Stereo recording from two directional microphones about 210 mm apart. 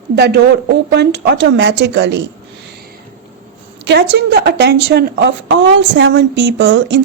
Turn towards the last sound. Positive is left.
turn(degrees=-60)  # may be behind; listen again after turning